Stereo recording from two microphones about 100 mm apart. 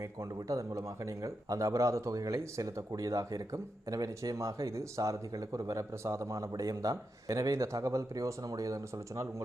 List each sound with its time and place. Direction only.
0.0 s speech: 30° right (ahead or behind)